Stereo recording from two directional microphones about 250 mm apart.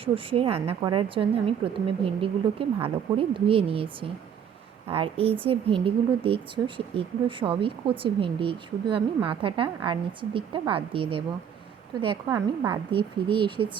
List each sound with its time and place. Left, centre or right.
0.0 s speech: right